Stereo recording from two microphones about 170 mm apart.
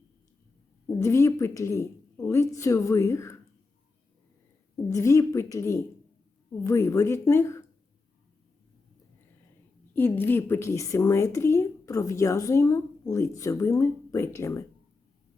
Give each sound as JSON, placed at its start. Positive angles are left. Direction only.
{"t": 0.9, "sound": "a woman's voice", "side_deg": 15}
{"t": 4.9, "sound": "a woman's voice", "side_deg": 20}
{"t": 9.9, "sound": "a woman's voice", "side_deg": 15}